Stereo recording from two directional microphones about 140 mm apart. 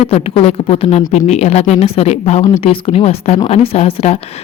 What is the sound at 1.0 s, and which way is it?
Speech, 60° left (ahead or behind).